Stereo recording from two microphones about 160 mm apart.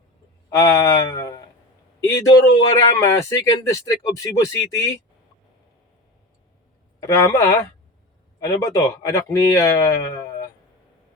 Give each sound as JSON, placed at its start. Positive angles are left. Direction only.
{"t": 0.5, "sound": "speech", "side_deg": 20}
{"t": 7.0, "sound": "speech", "side_deg": 20}